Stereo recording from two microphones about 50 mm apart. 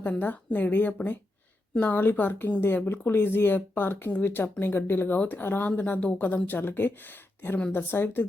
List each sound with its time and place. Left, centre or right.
0.2 s speech: left